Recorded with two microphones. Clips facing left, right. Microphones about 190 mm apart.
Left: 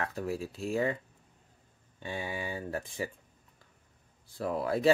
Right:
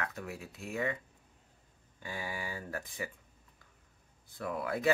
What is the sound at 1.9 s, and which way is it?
Speech, 25° left (ahead or behind).